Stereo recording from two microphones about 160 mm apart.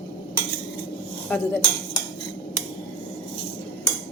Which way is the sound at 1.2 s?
10° left (ahead or behind).